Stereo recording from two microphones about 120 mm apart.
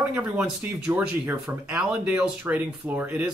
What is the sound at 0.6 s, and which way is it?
Speech, 10° right (ahead or behind).